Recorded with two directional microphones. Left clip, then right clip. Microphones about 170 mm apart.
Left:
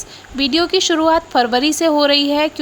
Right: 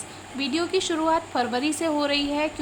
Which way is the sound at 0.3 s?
45° left (ahead or behind).